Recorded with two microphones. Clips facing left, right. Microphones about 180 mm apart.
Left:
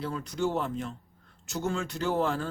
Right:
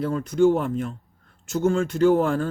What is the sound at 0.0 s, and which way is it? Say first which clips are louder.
Speech: right 11 dB; 50° right (ahead or behind).